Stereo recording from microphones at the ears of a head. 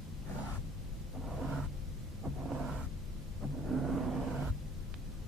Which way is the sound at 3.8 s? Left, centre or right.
Right.